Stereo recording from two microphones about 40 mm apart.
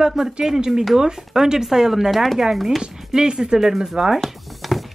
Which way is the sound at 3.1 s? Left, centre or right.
Centre.